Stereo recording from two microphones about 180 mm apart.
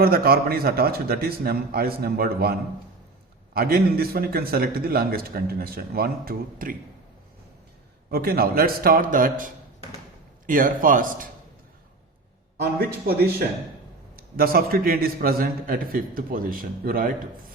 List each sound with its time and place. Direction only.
0.0 s a man's voice: 55° right (ahead or behind)
8.1 s a man's voice: 55° right (ahead or behind)
14.2 s a man's voice: 55° right (ahead or behind)